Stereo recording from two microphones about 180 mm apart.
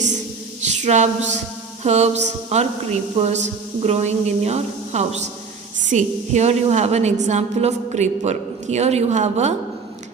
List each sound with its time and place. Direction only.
0.6 s a woman's voice: 40° right (ahead or behind)